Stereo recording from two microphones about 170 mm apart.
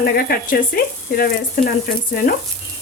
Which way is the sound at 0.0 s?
60° left (ahead or behind).